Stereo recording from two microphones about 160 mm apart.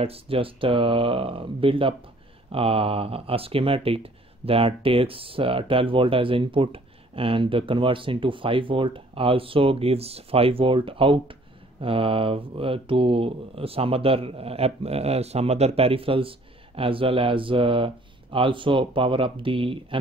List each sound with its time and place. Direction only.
0.0 s speech: 35° right (ahead or behind)